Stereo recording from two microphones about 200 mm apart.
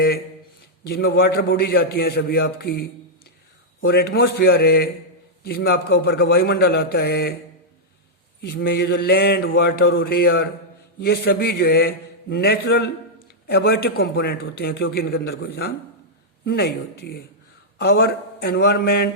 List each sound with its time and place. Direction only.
0.9 s mantra: 50° left (ahead or behind)
3.8 s mantra: 50° left (ahead or behind)
8.4 s mantra: 50° left (ahead or behind)